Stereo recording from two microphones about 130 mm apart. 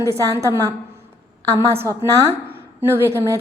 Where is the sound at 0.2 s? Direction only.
25° right (ahead or behind).